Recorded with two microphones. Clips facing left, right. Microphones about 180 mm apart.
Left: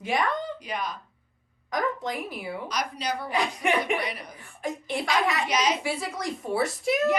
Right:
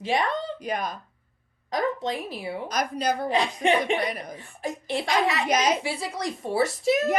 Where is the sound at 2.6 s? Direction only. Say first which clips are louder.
Right 6 dB; 45° right (ahead or behind).